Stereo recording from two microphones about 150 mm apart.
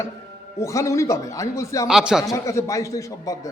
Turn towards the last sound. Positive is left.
turn(degrees=20)  # may be behind; listen again after turning